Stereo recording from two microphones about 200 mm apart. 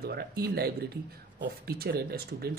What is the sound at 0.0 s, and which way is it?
Speech, 50° right (ahead or behind).